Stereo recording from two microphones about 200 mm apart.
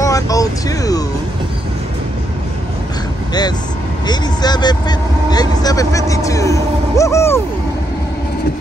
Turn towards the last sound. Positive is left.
turn(degrees=15)  # may be behind; listen again after turning